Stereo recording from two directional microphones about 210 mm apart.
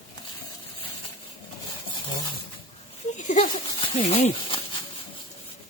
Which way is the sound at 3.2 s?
35° left (ahead or behind).